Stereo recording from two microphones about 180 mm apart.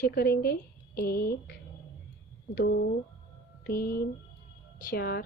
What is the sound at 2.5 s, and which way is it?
A woman's voice, 55° left (ahead or behind).